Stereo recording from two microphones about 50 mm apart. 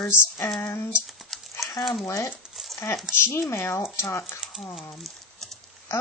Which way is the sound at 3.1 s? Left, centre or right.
Left.